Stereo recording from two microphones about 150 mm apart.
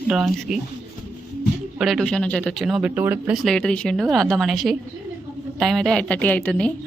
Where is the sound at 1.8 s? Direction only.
Centre (ahead or behind).